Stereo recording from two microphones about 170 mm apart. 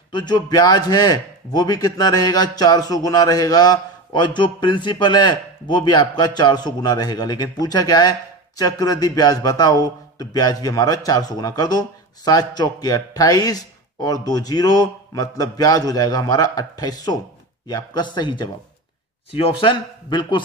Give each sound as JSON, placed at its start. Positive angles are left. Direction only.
{"t": 0.1, "sound": "a man's voice", "side_deg": 25}